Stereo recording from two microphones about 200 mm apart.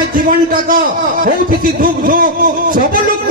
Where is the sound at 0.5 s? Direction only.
45° right (ahead or behind).